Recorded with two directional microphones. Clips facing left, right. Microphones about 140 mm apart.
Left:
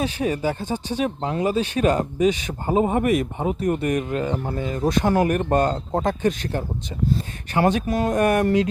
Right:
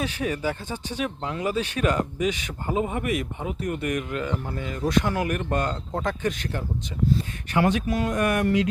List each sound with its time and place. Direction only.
0.0 s speech: 30° left (ahead or behind)